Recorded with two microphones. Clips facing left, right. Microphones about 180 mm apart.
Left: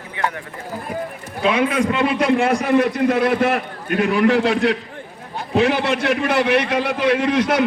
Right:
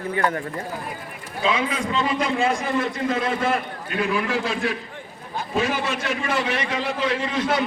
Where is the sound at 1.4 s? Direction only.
65° left (ahead or behind).